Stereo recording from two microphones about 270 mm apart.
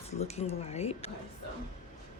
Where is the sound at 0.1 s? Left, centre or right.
Left.